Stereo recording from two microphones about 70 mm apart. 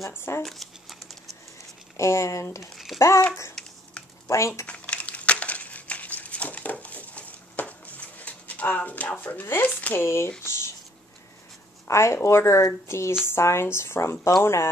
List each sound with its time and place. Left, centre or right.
0.4 s speech: centre
2.0 s speech: left
4.3 s speech: left
4.6 s crumpling: centre
9.7 s speech: left
9.9 s speech: left
10.4 s a sound: left
11.9 s speech: left